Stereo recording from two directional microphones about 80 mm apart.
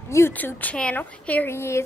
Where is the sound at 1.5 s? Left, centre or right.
Left.